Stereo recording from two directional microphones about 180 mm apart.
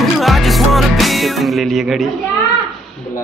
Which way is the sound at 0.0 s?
Centre (ahead or behind).